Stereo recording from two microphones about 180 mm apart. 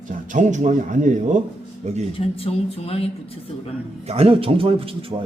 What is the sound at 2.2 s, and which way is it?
Speech, 30° left (ahead or behind).